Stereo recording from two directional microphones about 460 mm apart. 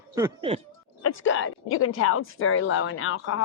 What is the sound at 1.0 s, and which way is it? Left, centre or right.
Speech, left.